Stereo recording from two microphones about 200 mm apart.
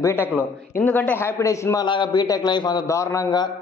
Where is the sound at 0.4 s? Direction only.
10° left (ahead or behind).